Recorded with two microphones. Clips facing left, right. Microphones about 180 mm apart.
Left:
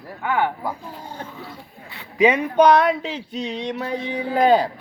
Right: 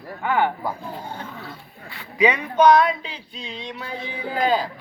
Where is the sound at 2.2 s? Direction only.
50° left (ahead or behind); by 3.9 s 75° left (ahead or behind).